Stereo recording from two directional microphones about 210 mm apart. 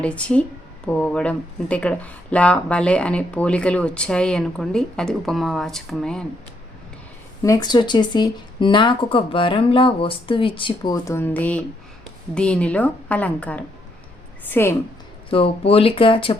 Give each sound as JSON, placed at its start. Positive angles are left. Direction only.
{"t": 0.0, "sound": "speech", "side_deg": 5}
{"t": 7.4, "sound": "a woman's voice", "side_deg": 15}
{"t": 15.3, "sound": "speech", "side_deg": 25}